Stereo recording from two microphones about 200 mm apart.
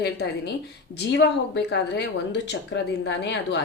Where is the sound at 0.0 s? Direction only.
55° left (ahead or behind).